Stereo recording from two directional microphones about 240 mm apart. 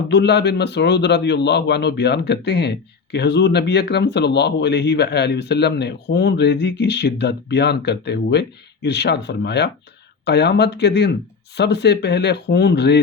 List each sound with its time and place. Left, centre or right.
0.1 s a man's voice: left